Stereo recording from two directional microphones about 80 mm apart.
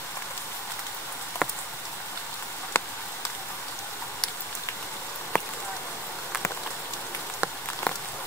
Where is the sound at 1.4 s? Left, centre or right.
Centre.